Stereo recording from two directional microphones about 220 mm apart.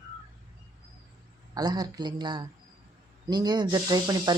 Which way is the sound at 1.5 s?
20° right (ahead or behind).